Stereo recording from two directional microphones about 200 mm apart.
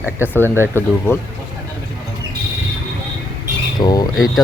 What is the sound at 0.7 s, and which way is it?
Speech, 10° left (ahead or behind).